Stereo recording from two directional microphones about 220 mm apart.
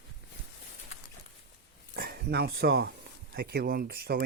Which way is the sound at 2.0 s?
45° right (ahead or behind).